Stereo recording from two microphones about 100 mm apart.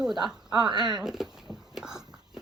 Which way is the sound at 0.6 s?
45° right (ahead or behind).